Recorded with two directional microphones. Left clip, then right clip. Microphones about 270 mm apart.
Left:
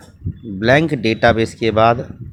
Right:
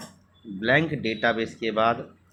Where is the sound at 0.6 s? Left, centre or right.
Left.